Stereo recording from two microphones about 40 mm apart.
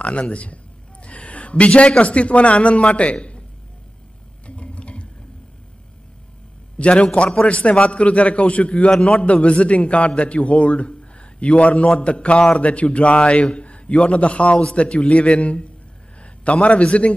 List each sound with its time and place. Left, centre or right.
0.0 s a man's voice: left
4.5 s sewing machine: left
6.8 s a man's voice: left
16.6 s a man's voice: left